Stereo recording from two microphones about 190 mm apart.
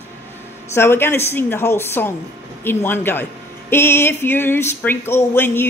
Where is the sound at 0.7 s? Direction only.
10° left (ahead or behind).